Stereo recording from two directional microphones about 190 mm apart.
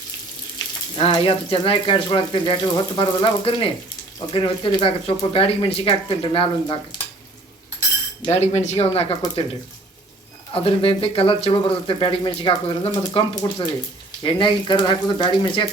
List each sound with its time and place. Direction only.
0.9 s speech: 30° left (ahead or behind)
8.2 s speech: 35° left (ahead or behind)
10.5 s speech: 30° left (ahead or behind)